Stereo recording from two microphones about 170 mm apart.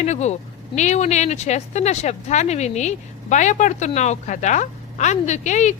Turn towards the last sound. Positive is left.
turn(degrees=45)  # may be behind; listen again after turning